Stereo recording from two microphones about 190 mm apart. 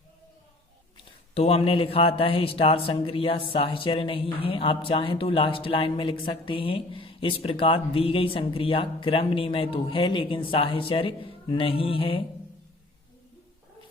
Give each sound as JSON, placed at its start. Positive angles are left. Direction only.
{"t": 1.3, "sound": "speech", "side_deg": 30}